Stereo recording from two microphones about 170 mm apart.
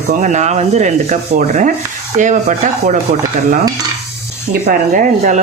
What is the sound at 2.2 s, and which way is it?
Speech, 45° right (ahead or behind).